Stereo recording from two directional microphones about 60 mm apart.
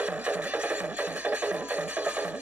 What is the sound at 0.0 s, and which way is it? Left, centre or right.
Music, centre.